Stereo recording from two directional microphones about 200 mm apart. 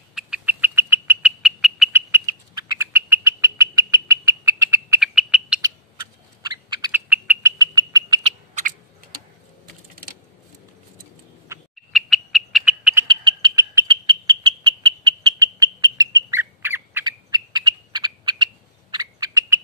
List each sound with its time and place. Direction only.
0.1 s bird: 5° right (ahead or behind)
1.9 s bird: 10° right (ahead or behind)
5.6 s bird: 20° right (ahead or behind)
6.9 s bird: 10° right (ahead or behind)
7.5 s frog: 20° right (ahead or behind)
8.2 s owl: 40° right (ahead or behind)
11.9 s frog: centre (ahead or behind)
13.0 s frog: 25° right (ahead or behind)